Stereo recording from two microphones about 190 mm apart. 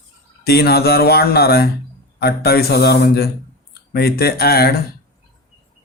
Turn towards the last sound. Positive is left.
turn(degrees=55)  # may be behind; listen again after turning